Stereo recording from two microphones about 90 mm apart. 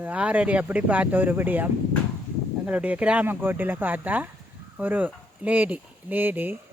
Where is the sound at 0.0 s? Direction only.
15° right (ahead or behind).